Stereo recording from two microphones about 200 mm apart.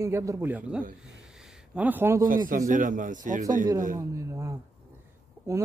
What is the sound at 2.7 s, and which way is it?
Speech, 40° right (ahead or behind).